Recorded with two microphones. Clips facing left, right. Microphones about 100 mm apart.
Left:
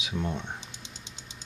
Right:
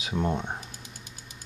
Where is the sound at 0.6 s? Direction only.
25° left (ahead or behind).